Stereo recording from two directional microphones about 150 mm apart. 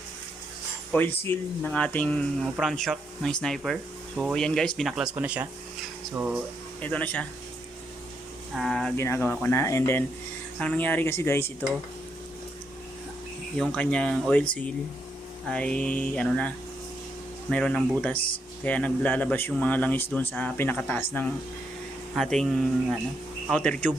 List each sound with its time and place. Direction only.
0.9 s speech: 15° left (ahead or behind); by 6.4 s 10° right (ahead or behind)
6.8 s speech: 10° left (ahead or behind)
8.5 s speech: centre (ahead or behind)
9.0 s speech: 15° left (ahead or behind)
13.6 s speech: 5° left (ahead or behind)
15.4 s speech: 10° left (ahead or behind)
17.5 s speech: 5° left (ahead or behind)
22.1 s speech: centre (ahead or behind)